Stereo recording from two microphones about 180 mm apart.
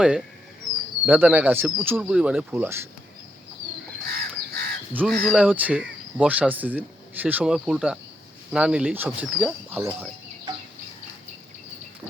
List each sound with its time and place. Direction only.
1.0 s speech: 10° right (ahead or behind)
4.1 s crow: 60° right (ahead or behind)
4.9 s speech: centre (ahead or behind)